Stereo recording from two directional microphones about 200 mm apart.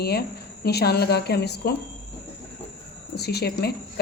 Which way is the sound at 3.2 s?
55° left (ahead or behind).